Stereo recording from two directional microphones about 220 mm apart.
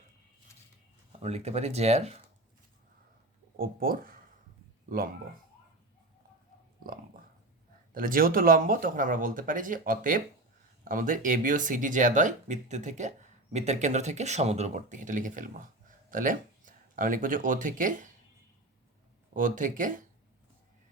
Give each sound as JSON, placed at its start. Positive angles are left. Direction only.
{"t": 1.2, "sound": "speech", "side_deg": -30}
{"t": 3.6, "sound": "speech", "side_deg": -40}
{"t": 7.9, "sound": "speech", "side_deg": -40}
{"t": 19.3, "sound": "speech", "side_deg": -35}